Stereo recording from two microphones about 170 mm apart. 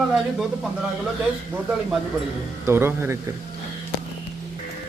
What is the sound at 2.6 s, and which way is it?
Speech, 15° right (ahead or behind).